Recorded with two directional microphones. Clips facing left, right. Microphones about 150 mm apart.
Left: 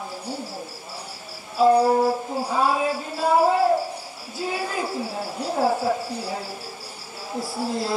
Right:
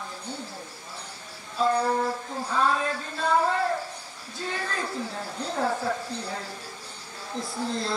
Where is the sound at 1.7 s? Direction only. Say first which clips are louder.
Left 8 dB; 25° left (ahead or behind).